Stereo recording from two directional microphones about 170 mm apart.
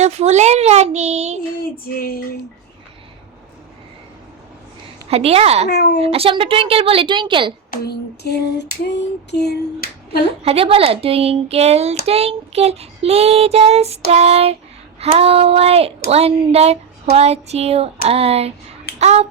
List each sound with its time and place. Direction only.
0.0 s speech: 40° right (ahead or behind)
1.8 s child singing: 60° left (ahead or behind)
5.0 s speech: 35° right (ahead or behind)
5.6 s lullaby: 75° left (ahead or behind)
6.0 s speech: 35° right (ahead or behind)
7.7 s lullaby: 70° left (ahead or behind)
10.4 s speech: 35° right (ahead or behind)